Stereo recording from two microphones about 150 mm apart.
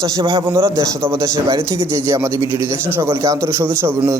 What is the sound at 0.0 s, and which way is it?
A man's voice, 30° right (ahead or behind).